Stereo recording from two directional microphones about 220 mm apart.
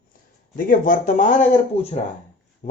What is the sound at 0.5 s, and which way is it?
Speech, 40° left (ahead or behind).